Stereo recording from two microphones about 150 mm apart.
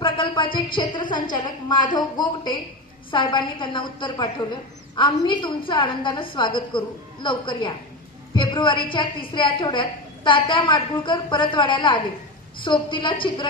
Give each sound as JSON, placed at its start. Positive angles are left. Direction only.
{"t": 0.0, "sound": "a woman's voice", "side_deg": 35}